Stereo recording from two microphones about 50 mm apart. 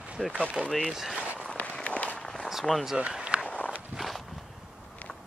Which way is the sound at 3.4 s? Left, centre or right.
Left.